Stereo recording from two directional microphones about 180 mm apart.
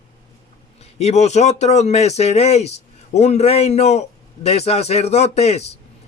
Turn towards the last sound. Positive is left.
turn(degrees=35)  # may be behind; listen again after turning